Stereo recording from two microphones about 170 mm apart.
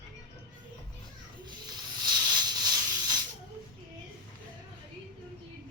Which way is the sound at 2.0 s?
25° right (ahead or behind).